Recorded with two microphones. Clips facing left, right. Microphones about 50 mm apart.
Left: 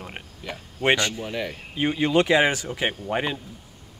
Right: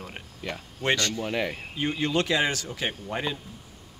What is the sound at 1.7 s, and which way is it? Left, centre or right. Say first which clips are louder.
Speech: left 6 dB; left.